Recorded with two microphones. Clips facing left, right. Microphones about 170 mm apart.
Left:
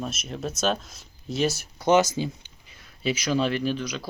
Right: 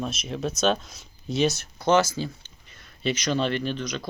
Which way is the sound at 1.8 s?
20° left (ahead or behind).